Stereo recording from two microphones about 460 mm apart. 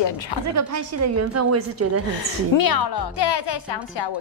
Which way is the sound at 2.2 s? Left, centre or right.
Left.